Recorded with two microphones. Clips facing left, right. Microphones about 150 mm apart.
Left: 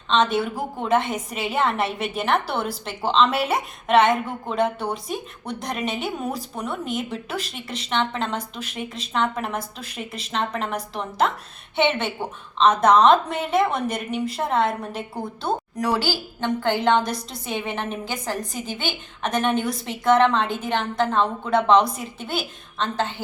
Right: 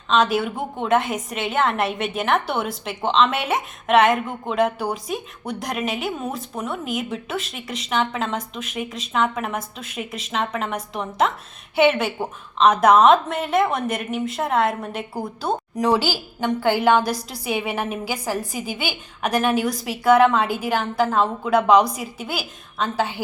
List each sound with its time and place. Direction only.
0.1 s a woman's voice: centre (ahead or behind)
8.4 s a woman's voice: 35° left (ahead or behind)
8.7 s a woman's voice: 5° right (ahead or behind)
15.8 s a woman's voice: 15° right (ahead or behind)